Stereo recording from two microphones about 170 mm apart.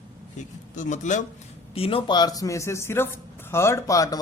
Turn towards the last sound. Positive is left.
turn(degrees=20)  # may be behind; listen again after turning